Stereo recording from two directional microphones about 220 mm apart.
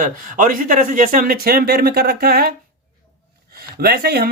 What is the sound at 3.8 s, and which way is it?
Speech, 45° right (ahead or behind).